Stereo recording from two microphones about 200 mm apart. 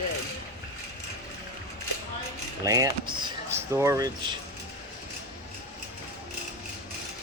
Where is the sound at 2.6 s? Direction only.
15° right (ahead or behind).